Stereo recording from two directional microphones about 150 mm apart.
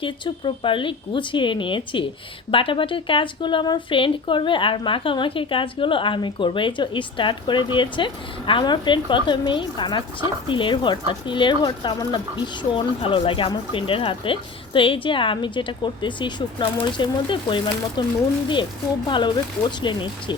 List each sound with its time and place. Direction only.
0.0 s speech: 35° left (ahead or behind)
19.0 s speech: 30° left (ahead or behind)